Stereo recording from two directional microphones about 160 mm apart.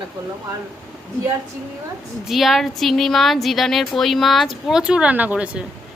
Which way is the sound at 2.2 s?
Centre (ahead or behind).